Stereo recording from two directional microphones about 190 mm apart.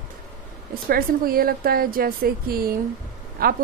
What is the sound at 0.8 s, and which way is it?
Speech, 50° right (ahead or behind).